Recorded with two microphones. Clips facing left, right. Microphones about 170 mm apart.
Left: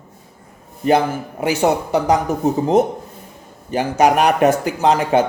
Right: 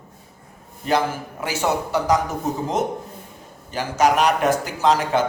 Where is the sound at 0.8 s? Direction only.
60° left (ahead or behind).